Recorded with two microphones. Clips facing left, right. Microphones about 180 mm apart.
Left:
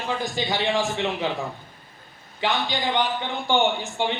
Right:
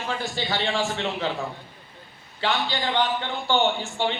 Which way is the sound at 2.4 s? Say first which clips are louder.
Left 1 dB; 15° left (ahead or behind).